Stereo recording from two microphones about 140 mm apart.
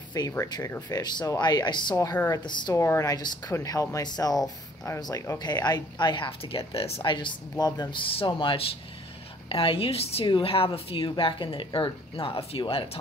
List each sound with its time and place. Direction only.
0.3 s speech: 25° left (ahead or behind)
2.1 s speech: 20° left (ahead or behind)
2.4 s speech: 30° left (ahead or behind)
2.8 s speech: 20° left (ahead or behind); by 13.0 s 45° left (ahead or behind)